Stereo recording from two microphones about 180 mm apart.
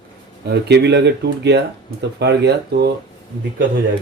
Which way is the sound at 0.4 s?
70° right (ahead or behind).